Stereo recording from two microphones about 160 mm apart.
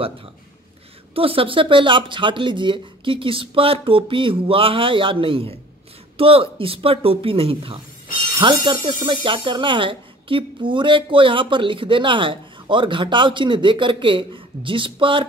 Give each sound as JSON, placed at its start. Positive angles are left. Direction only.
{"t": 1.1, "sound": "speech", "side_deg": -35}